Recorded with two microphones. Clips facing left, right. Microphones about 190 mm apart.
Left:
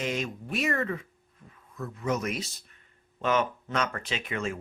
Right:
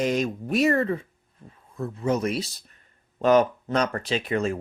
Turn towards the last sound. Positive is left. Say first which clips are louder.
# right 7 dB
turn(degrees=-35)  # may be behind; listen again after turning